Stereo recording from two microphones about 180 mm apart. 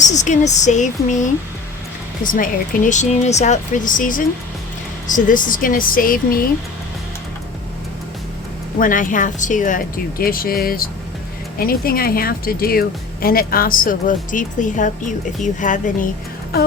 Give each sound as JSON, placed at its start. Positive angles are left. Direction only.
{"t": 0.1, "sound": "a woman's voice", "side_deg": 40}
{"t": 8.8, "sound": "a woman's voice", "side_deg": 45}